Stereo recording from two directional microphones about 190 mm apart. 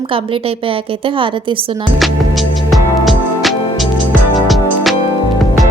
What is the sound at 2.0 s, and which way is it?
Music, centre (ahead or behind).